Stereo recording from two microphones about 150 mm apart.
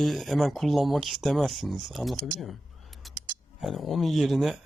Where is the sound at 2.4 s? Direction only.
Centre (ahead or behind).